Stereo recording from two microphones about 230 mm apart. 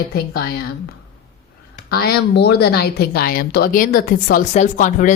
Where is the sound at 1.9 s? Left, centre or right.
Left.